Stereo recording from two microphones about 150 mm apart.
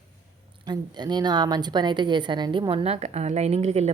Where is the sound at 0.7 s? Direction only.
30° right (ahead or behind).